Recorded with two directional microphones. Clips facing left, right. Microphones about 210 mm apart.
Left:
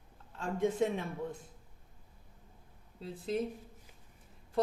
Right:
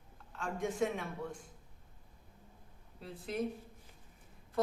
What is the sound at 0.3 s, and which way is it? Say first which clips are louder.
Speech: left 4 dB; 25° left (ahead or behind).